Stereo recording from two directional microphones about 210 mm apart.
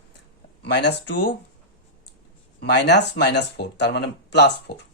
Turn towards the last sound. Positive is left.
turn(degrees=55)  # may be behind; listen again after turning